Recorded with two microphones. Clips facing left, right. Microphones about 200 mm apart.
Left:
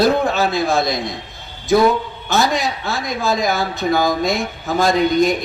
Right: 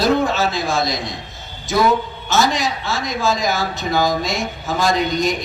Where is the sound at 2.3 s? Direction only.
55° left (ahead or behind).